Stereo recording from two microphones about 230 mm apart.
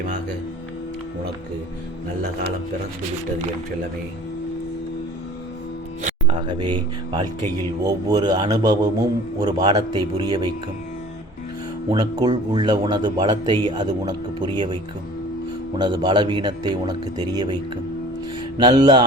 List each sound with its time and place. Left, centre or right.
6.0 s music: right
6.4 s a man's voice: right
11.9 s speech: centre
15.8 s speech: centre